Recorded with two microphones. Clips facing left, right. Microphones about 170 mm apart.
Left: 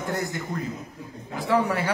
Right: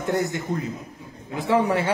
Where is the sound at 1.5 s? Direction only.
25° right (ahead or behind).